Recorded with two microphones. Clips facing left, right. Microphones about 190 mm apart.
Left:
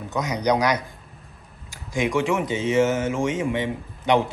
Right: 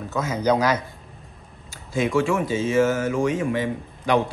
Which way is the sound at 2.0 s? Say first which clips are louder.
Right 1 dB; 15° left (ahead or behind).